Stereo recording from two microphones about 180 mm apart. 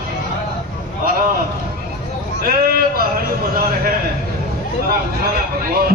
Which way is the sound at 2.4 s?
55° right (ahead or behind).